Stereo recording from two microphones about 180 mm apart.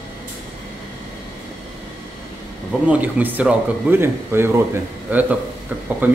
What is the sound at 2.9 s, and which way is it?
Speech, 10° right (ahead or behind).